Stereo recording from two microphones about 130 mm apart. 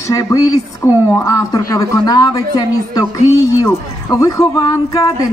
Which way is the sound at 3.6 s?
25° left (ahead or behind).